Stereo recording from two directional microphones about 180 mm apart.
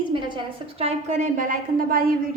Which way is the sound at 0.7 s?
35° right (ahead or behind).